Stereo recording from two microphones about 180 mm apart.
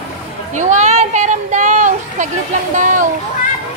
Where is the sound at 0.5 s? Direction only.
40° right (ahead or behind).